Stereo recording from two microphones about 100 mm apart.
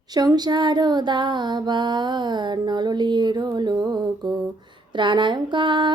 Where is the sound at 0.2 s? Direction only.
45° right (ahead or behind).